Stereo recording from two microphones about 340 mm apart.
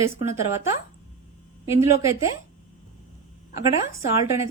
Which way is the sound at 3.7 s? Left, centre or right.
Centre.